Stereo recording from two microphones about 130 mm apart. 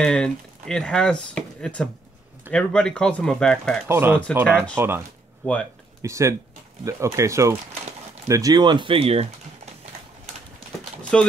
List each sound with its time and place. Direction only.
0.0 s speech: 5° left (ahead or behind)
3.8 s speech: 15° right (ahead or behind)
4.5 s speech: 10° left (ahead or behind)
4.7 s speech: 15° right (ahead or behind)
5.4 s speech: 5° left (ahead or behind)
6.0 s speech: 25° right (ahead or behind); by 9.3 s 50° right (ahead or behind)
11.0 s a sound: 5° left (ahead or behind)